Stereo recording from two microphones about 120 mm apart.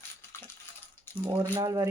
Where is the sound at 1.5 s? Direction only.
35° right (ahead or behind).